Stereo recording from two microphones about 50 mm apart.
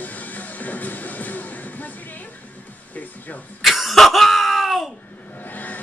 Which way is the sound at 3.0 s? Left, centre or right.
Left.